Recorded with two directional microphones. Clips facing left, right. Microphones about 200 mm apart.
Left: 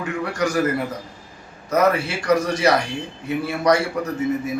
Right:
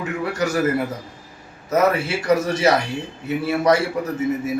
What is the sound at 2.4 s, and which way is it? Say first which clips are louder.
A man's voice: right 1 dB; 25° right (ahead or behind).